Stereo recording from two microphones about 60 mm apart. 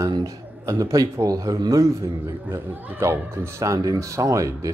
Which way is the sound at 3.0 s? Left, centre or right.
Right.